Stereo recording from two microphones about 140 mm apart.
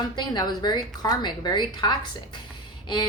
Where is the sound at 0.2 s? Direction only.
30° left (ahead or behind).